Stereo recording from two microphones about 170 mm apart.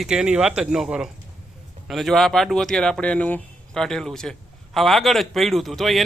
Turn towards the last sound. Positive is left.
turn(degrees=0)  # may be behind; listen again after turning